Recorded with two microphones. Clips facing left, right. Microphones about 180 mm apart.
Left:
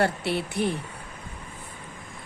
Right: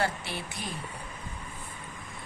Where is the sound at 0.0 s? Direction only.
65° left (ahead or behind).